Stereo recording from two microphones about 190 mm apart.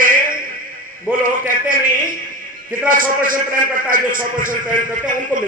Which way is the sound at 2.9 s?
45° right (ahead or behind).